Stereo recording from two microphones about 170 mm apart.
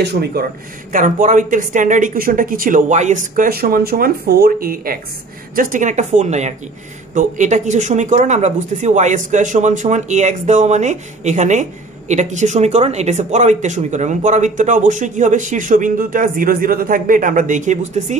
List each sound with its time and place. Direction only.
0.0 s speech: 75° right (ahead or behind)
0.9 s speech: 50° right (ahead or behind)